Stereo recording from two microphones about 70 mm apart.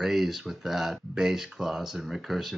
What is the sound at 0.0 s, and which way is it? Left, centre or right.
Speech, centre.